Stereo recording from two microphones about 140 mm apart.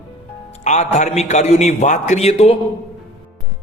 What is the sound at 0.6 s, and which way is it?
A man's voice, 55° left (ahead or behind).